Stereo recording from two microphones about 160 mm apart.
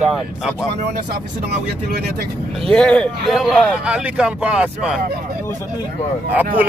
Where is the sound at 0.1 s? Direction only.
Centre (ahead or behind).